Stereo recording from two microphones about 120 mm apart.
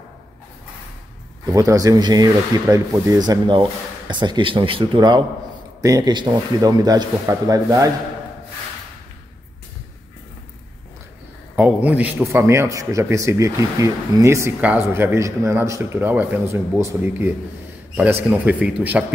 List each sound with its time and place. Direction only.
1.5 s speech: 30° right (ahead or behind)
11.5 s a man's voice: 10° right (ahead or behind)
14.6 s a man's voice: 15° right (ahead or behind)
18.3 s speech: 10° right (ahead or behind)